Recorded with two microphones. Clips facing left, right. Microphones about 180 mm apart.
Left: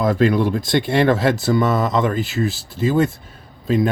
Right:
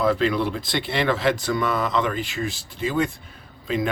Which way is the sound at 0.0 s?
45° left (ahead or behind).